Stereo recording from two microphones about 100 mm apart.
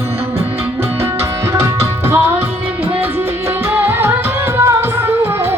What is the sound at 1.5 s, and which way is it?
Tabla, 25° right (ahead or behind).